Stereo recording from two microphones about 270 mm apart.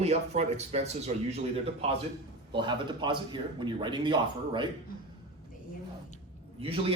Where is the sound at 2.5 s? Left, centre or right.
Centre.